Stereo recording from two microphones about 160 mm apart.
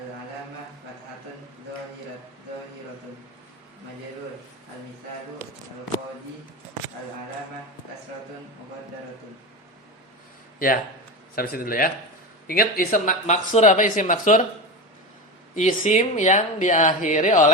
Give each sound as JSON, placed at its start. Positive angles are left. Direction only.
{"t": 11.3, "sound": "speech", "side_deg": 70}
{"t": 15.5, "sound": "speech", "side_deg": 50}